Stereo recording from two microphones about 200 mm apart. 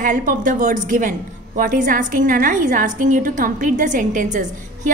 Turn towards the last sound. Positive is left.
turn(degrees=-40)  # may be behind; listen again after turning